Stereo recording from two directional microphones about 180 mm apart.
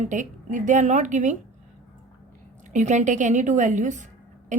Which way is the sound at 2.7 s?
45° right (ahead or behind).